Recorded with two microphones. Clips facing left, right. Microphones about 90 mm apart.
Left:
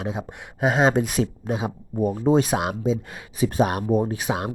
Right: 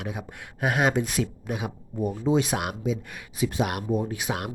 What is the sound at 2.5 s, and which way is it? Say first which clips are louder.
Speech: left 5 dB; 25° left (ahead or behind).